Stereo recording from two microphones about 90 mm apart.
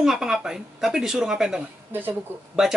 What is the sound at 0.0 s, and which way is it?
Speech, 5° right (ahead or behind).